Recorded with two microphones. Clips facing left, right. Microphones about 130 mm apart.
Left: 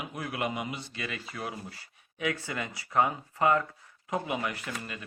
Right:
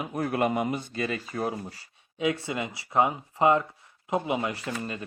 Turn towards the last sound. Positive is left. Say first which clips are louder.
# right 5 dB
turn(degrees=-30)  # may be behind; listen again after turning